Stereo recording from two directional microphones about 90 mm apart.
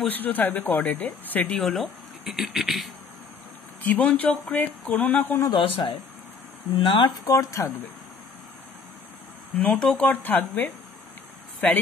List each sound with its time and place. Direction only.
0.0 s speech: 20° left (ahead or behind)
1.6 s speech: centre (ahead or behind)
3.8 s speech: 20° left (ahead or behind)
5.5 s speech: 60° left (ahead or behind)
6.8 s speech: 75° left (ahead or behind)
7.2 s speech: 35° left (ahead or behind)
9.6 s speech: 15° left (ahead or behind)